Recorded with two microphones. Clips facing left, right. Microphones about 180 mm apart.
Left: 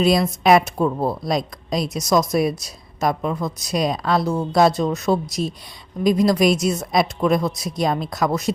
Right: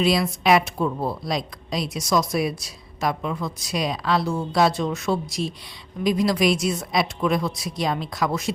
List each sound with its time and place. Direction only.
0.0 s a woman's voice: 45° left (ahead or behind)